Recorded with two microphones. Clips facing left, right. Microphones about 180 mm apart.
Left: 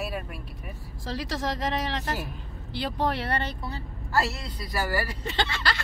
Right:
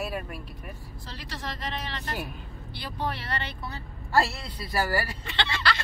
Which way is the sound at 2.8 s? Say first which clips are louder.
Left 6 dB; 75° left (ahead or behind).